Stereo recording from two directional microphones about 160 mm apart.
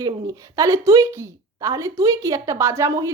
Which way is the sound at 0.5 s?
20° right (ahead or behind).